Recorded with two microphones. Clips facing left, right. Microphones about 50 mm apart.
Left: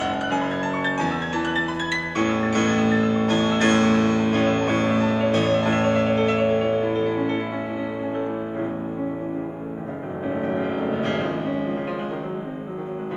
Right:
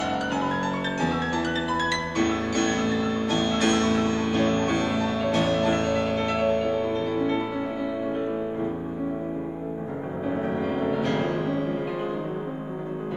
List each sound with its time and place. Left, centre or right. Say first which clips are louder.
0.0 s music: left 2 dB; left
10.6 s music: left 1 dB; left